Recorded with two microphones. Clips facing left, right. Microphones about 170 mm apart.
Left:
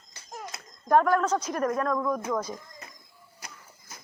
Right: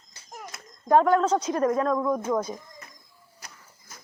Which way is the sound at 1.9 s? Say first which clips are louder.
Right 3 dB; 25° right (ahead or behind).